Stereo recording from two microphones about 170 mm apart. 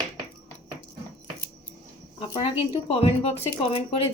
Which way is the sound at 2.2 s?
30° left (ahead or behind).